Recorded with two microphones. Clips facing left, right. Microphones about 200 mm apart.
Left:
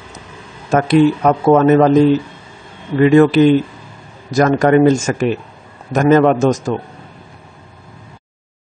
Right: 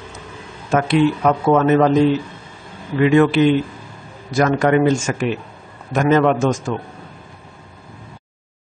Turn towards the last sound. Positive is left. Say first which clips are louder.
# left 4 dB
turn(degrees=40)  # may be behind; listen again after turning